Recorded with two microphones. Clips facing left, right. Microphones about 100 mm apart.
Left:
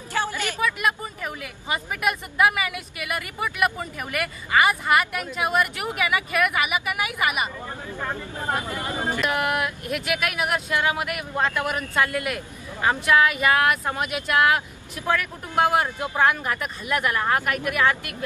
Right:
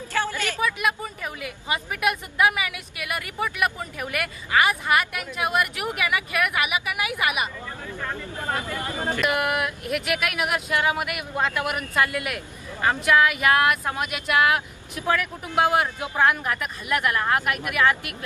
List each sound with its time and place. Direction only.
0.1 s a sound: 15° left (ahead or behind)
0.6 s a woman's voice: centre (ahead or behind)
8.0 s speech: 20° left (ahead or behind)
9.3 s a woman's voice: 5° right (ahead or behind)